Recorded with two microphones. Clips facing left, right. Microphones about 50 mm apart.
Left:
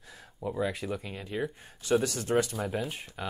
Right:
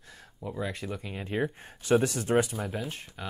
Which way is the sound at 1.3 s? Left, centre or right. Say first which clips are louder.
Right 3 dB; right.